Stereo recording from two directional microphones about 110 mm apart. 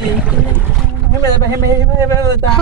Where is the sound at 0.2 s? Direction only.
15° right (ahead or behind).